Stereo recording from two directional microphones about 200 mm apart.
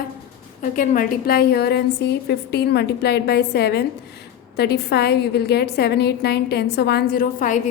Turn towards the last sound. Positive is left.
turn(degrees=40)  # may be behind; listen again after turning